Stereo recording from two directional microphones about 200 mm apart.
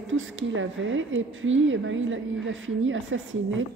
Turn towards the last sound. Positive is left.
turn(degrees=-75)  # may be behind; listen again after turning